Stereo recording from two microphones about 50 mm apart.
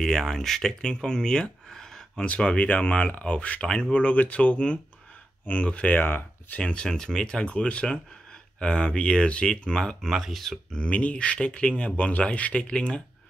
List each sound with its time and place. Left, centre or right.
0.0 s speech: centre
2.2 s speech: left
3.6 s speech: centre
3.9 s speech: left
5.9 s speech: left
6.6 s speech: centre
10.1 s speech: centre
10.7 s speech: left